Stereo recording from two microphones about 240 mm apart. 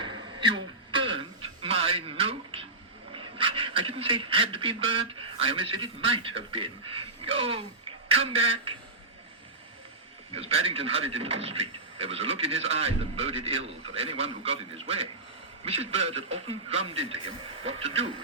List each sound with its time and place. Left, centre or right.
0.0 s a sound: centre
1.6 s music: right
3.1 s a man's voice: right
10.3 s speech: right